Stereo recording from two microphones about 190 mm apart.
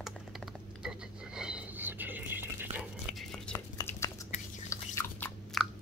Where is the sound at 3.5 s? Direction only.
20° left (ahead or behind).